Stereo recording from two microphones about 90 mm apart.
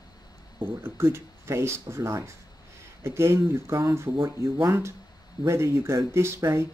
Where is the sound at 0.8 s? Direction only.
25° right (ahead or behind).